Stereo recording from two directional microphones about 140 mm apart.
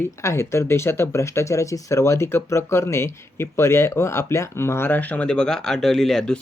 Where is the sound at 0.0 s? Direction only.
20° left (ahead or behind).